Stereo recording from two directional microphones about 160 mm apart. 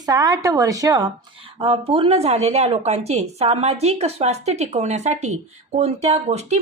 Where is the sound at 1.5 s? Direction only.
35° right (ahead or behind).